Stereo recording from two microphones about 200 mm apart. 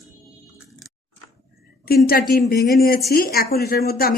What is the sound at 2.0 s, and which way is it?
A woman's voice, 50° left (ahead or behind).